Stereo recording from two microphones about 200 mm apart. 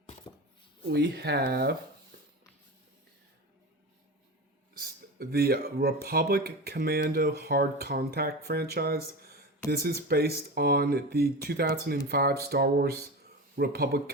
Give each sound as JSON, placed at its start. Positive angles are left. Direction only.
{"t": 0.9, "sound": "speech", "side_deg": -55}
{"t": 4.8, "sound": "speech", "side_deg": -50}